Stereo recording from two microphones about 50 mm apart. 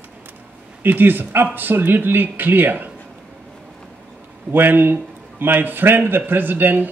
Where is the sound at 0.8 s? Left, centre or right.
Right.